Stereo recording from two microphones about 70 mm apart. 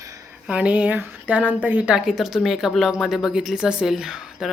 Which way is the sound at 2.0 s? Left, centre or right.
Centre.